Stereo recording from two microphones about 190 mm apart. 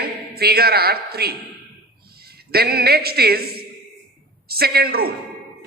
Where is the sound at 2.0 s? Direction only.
55° right (ahead or behind).